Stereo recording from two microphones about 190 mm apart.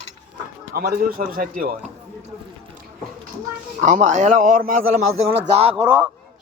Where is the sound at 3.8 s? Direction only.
40° right (ahead or behind).